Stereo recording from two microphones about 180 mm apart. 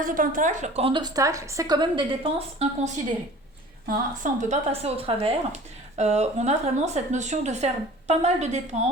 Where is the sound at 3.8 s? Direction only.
50° right (ahead or behind).